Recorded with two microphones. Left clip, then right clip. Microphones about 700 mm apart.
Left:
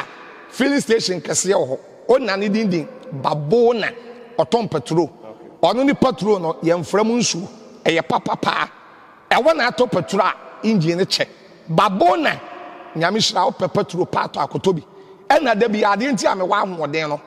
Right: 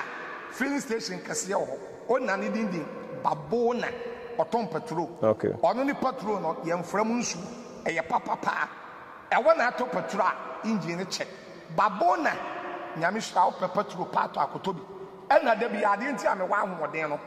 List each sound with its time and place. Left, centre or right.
0.6 s a man's voice: left
5.6 s a man's voice: left
11.7 s a man's voice: left
13.0 s a man's voice: left